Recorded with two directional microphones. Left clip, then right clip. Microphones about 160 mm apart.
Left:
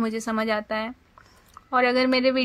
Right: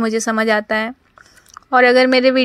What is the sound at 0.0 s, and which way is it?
Speech, 35° right (ahead or behind).